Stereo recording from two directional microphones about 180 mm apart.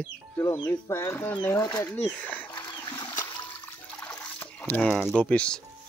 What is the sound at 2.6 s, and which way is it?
Splash, 20° left (ahead or behind).